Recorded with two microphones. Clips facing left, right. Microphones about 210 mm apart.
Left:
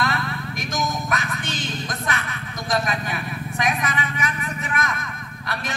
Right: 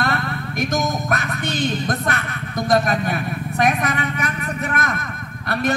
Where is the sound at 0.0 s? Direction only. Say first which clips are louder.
Right 3 dB; 60° right (ahead or behind).